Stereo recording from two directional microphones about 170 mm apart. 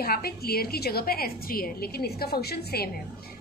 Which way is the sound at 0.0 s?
65° left (ahead or behind).